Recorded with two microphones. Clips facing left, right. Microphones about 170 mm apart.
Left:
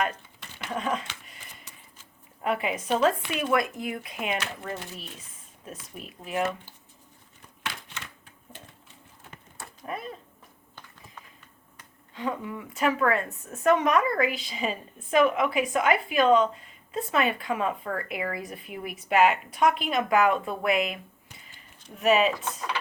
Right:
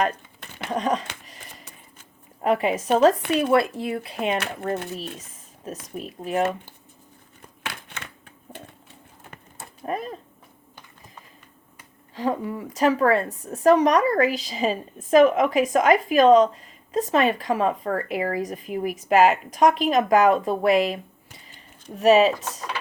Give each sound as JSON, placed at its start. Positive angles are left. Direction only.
{"t": 0.7, "sound": "a woman's voice", "side_deg": -40}
{"t": 2.4, "sound": "a woman's voice", "side_deg": -40}
{"t": 3.5, "sound": "a woman's voice", "side_deg": -30}
{"t": 4.4, "sound": "a woman's voice", "side_deg": -55}
{"t": 7.6, "sound": "typewriter", "side_deg": -55}
{"t": 9.8, "sound": "a woman's voice", "side_deg": -40}
{"t": 12.1, "sound": "a woman's voice", "side_deg": -35}